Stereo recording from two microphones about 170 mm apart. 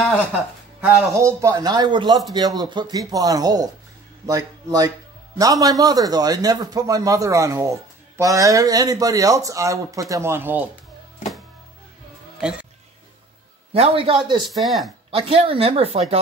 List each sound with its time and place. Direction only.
0.7 s speech: 15° right (ahead or behind)
12.4 s speech: 5° right (ahead or behind)
13.7 s speech: 35° right (ahead or behind)
14.6 s speech: centre (ahead or behind)
15.0 s speech: 35° right (ahead or behind)